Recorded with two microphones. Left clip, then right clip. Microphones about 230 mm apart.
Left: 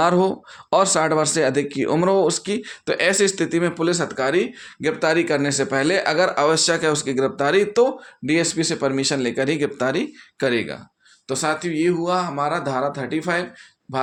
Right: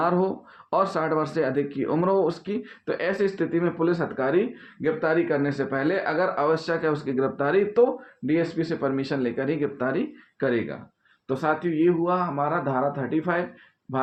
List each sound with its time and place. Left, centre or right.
0.0 s speech: left
4.9 s speech: left
11.3 s speech: centre